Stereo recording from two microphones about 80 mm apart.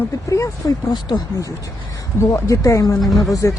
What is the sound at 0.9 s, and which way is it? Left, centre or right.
Speech, left.